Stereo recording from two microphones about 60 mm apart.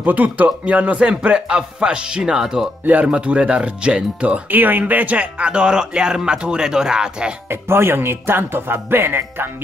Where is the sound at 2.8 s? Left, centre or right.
Right.